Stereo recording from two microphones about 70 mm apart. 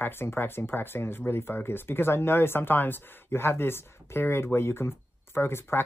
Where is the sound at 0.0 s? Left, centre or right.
Left.